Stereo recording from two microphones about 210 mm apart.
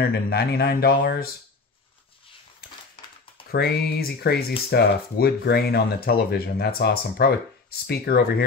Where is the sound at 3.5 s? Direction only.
45° left (ahead or behind).